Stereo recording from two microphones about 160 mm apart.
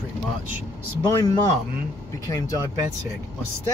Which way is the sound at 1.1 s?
25° left (ahead or behind).